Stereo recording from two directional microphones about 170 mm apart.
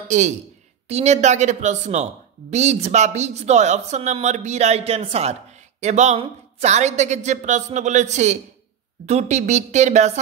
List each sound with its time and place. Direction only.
0.1 s speech: 45° right (ahead or behind)